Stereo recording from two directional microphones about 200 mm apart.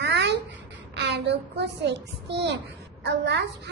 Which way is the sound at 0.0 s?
60° right (ahead or behind).